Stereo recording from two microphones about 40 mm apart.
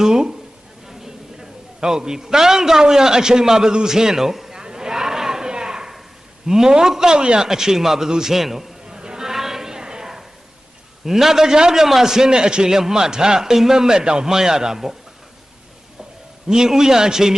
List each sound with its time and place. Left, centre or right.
0.0 s speech: centre
0.9 s a sound: centre
6.5 s a man's voice: centre
9.0 s a sound: centre
11.0 s a man's voice: centre
16.5 s a man's voice: centre